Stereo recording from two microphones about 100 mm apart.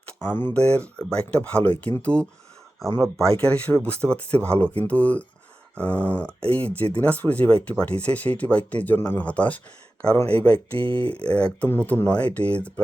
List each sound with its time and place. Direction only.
0.3 s speech: 15° left (ahead or behind)
10.8 s speech: 60° right (ahead or behind)
11.1 s speech: 10° left (ahead or behind)